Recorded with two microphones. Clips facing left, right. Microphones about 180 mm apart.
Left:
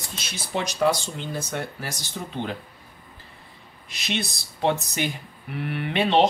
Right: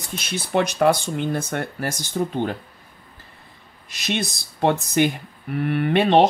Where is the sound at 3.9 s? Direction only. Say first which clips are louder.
Right 4 dB; 45° right (ahead or behind).